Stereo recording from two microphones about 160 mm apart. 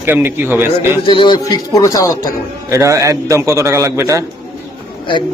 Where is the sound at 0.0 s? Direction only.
15° right (ahead or behind).